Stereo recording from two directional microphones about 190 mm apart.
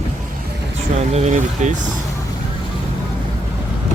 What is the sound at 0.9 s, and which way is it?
Speech, 35° right (ahead or behind).